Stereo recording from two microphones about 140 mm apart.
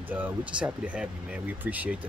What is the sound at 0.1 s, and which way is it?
Speech, 10° right (ahead or behind).